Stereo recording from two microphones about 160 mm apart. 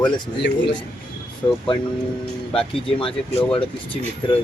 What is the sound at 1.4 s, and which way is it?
Speech, 30° left (ahead or behind).